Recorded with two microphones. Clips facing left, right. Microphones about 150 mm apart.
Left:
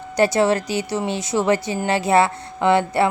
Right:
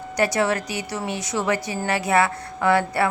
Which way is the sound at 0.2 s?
30° left (ahead or behind).